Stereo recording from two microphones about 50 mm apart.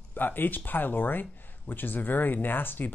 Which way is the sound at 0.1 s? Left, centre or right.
Left.